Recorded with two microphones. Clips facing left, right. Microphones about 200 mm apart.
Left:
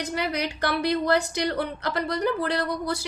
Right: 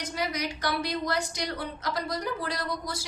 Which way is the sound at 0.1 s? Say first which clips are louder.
Left 1 dB; 60° left (ahead or behind).